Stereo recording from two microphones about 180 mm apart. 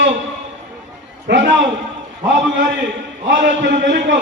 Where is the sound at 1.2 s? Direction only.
80° right.